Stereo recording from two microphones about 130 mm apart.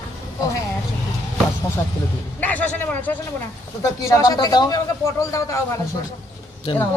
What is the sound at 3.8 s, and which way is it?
A man's voice, 25° left (ahead or behind).